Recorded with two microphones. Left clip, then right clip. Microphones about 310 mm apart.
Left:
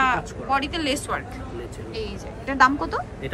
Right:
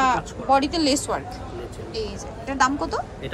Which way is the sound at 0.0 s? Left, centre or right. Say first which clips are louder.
Right 1 dB; centre.